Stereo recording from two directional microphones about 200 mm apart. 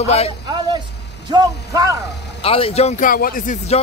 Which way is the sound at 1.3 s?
20° right (ahead or behind).